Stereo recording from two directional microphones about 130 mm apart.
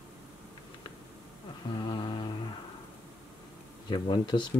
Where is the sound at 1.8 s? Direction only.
40° left (ahead or behind).